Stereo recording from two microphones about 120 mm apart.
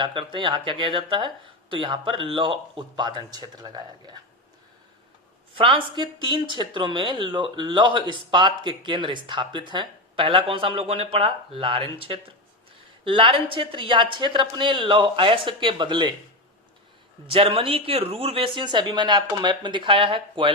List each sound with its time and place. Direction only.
0.0 s speech: 45° right (ahead or behind)
5.5 s speech: 45° right (ahead or behind)
17.3 s speech: 50° right (ahead or behind)